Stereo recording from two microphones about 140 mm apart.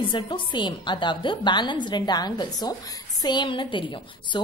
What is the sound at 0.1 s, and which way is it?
A woman's voice, 35° left (ahead or behind).